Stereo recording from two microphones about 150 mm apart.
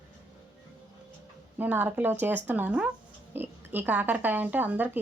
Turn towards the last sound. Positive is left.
turn(degrees=-10)  # may be behind; listen again after turning